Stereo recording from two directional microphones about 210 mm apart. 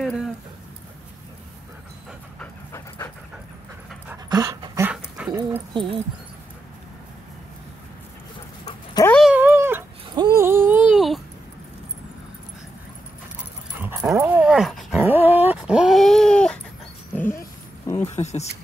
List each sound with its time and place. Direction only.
2.3 s pant: 10° left (ahead or behind)
4.1 s dog: 15° right (ahead or behind)
5.7 s speech: 25° right (ahead or behind)
8.6 s dog: 20° left (ahead or behind)
9.1 s cat: 5° right (ahead or behind)
13.8 s dog: 10° right (ahead or behind); by 18.1 s 15° left (ahead or behind)
18.1 s a sound: 30° left (ahead or behind)